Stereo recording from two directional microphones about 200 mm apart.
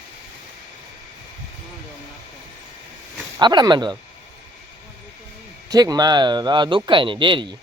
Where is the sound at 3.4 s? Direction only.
20° right (ahead or behind).